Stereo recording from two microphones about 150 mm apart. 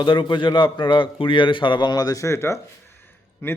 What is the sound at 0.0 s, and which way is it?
A man's voice, 30° left (ahead or behind).